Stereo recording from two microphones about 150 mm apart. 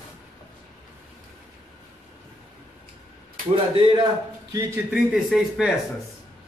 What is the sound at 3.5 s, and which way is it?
Speech, 35° right (ahead or behind).